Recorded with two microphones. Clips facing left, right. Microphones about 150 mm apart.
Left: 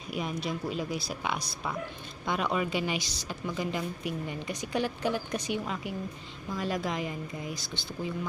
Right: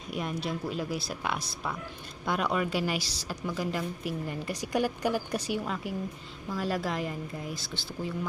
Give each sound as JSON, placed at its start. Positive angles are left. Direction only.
{"t": 0.1, "sound": "a woman's voice", "side_deg": 0}